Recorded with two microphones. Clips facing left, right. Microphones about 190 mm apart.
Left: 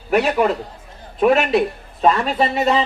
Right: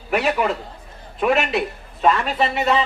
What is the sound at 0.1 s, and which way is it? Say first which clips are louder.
Speech: left 4 dB; 40° left (ahead or behind).